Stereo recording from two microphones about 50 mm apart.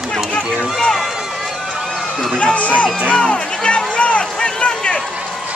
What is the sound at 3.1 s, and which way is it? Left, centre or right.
Music, centre.